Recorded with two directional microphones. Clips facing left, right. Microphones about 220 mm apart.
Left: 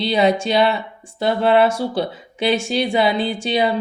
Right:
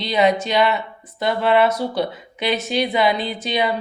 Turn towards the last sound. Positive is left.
turn(degrees=30)  # may be behind; listen again after turning